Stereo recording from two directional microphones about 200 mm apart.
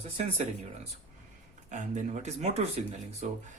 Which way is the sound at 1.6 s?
40° right (ahead or behind).